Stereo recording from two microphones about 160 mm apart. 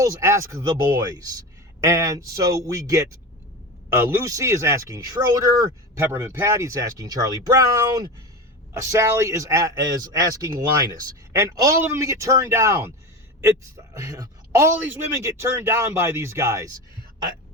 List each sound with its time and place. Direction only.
0.0 s speech: 20° right (ahead or behind)
13.9 s a man's voice: 20° right (ahead or behind)